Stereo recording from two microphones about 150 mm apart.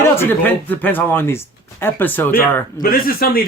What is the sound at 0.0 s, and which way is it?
Speech, 15° left (ahead or behind).